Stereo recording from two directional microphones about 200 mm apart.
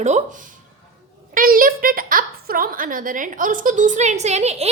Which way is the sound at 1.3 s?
45° right (ahead or behind).